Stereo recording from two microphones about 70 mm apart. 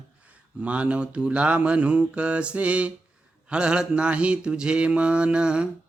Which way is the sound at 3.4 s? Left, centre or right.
Centre.